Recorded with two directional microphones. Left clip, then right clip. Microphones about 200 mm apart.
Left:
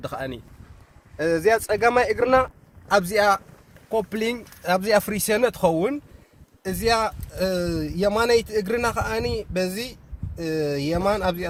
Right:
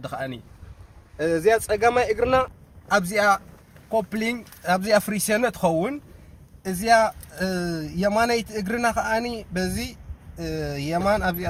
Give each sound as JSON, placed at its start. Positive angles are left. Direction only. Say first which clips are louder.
{"t": 0.0, "sound": "speech", "louder": "even", "side_deg": 50}
{"t": 1.1, "sound": "a man's voice", "louder": "even", "side_deg": 30}
{"t": 2.9, "sound": "speech", "louder": "left 1 dB", "side_deg": 50}